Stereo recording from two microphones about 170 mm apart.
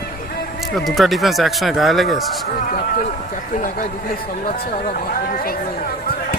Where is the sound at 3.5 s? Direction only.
50° left (ahead or behind).